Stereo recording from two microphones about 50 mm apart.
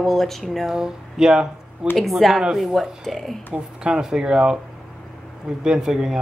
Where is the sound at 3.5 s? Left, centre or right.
Right.